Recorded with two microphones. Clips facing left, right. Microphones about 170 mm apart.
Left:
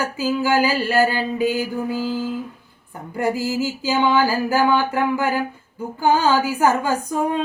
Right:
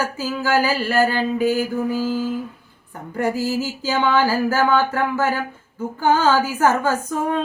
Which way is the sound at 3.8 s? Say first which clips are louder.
Left 1 dB; 15° left (ahead or behind).